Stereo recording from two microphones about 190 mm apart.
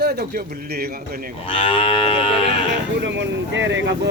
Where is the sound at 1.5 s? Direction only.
30° left (ahead or behind).